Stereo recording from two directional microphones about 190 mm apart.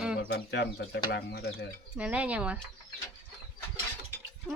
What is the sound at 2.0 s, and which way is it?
Speech, 5° right (ahead or behind).